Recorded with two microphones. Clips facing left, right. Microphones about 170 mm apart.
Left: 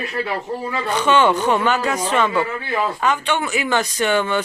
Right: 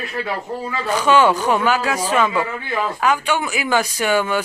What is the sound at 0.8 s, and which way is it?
Speech, 10° right (ahead or behind).